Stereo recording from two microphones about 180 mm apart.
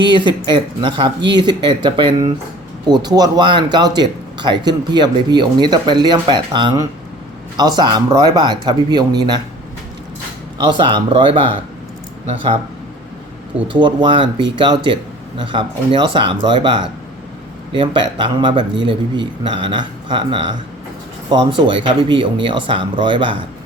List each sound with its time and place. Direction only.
0.0 s speech: 25° right (ahead or behind)
10.6 s speech: 25° right (ahead or behind)
13.7 s speech: 25° right (ahead or behind)
15.5 s speech: 25° right (ahead or behind)